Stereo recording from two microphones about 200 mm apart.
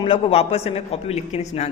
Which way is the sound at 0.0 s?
25° left (ahead or behind).